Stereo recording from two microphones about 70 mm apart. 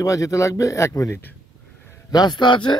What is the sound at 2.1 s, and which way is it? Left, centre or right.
Speech, left.